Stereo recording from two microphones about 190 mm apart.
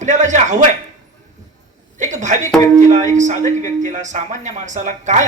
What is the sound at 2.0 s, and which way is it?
A woman's voice, 40° right (ahead or behind).